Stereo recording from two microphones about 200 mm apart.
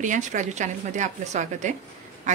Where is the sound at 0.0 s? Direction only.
40° right (ahead or behind).